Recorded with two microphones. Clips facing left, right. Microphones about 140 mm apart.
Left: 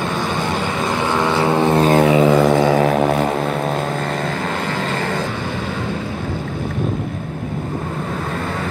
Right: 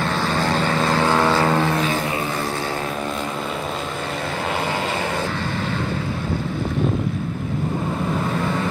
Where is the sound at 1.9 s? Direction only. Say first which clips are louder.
Left 11 dB; 80° left.